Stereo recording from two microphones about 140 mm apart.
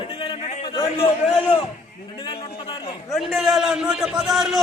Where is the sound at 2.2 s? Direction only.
35° left (ahead or behind).